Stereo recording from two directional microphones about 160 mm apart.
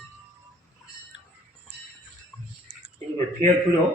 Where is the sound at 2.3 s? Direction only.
5° left (ahead or behind).